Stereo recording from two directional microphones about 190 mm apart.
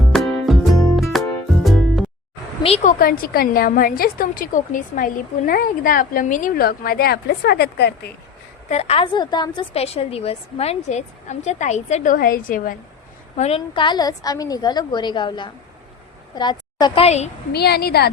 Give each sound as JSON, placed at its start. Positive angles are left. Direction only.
{"t": 0.1, "sound": "music", "side_deg": 5}
{"t": 2.6, "sound": "a woman's voice", "side_deg": 35}
{"t": 3.0, "sound": "a woman's voice", "side_deg": 50}
{"t": 8.7, "sound": "a woman's voice", "side_deg": 35}
{"t": 13.3, "sound": "a woman's voice", "side_deg": 35}
{"t": 17.5, "sound": "a woman's voice", "side_deg": 55}